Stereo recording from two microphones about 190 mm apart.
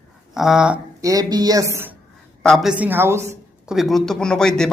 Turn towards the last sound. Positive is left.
turn(degrees=5)  # may be behind; listen again after turning